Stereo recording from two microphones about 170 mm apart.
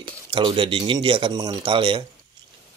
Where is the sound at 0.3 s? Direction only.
30° right (ahead or behind).